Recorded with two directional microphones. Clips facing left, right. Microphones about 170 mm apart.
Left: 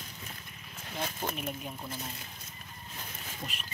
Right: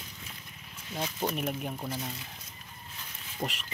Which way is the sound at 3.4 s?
60° right (ahead or behind).